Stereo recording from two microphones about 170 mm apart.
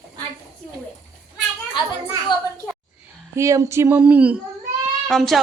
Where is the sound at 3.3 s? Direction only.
15° right (ahead or behind).